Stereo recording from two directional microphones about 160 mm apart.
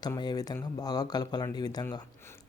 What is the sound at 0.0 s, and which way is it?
Speech, 25° left (ahead or behind).